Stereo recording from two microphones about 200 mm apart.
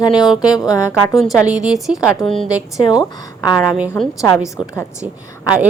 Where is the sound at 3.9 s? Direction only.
15° left (ahead or behind).